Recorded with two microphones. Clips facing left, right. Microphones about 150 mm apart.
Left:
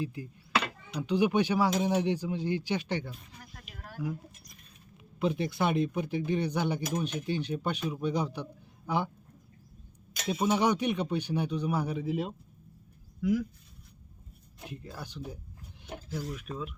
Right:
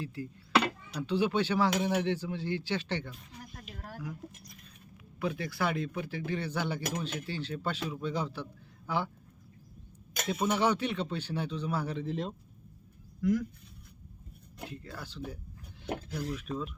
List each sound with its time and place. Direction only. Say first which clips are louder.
0.0 s speech: left 3 dB; 15° left (ahead or behind)
3.7 s a sound: right 1 dB; 30° right (ahead or behind)
5.2 s speech: left 4 dB; 20° left (ahead or behind)
10.2 s speech: left 2 dB; 15° left (ahead or behind)
14.7 s speech: left 4 dB; 15° left (ahead or behind)